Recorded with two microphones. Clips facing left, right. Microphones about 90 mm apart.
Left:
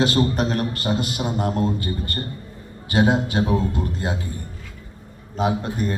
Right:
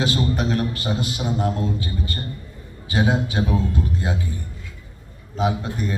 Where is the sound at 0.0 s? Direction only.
50° left (ahead or behind).